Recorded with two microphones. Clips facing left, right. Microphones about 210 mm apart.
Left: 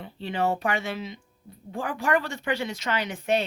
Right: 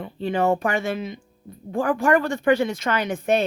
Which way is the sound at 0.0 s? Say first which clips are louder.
Right 5 dB; 50° right (ahead or behind).